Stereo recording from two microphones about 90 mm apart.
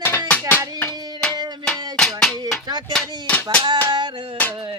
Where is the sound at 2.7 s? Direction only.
55° right (ahead or behind).